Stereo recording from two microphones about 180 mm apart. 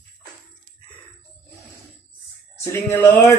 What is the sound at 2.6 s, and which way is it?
Speech, 15° left (ahead or behind).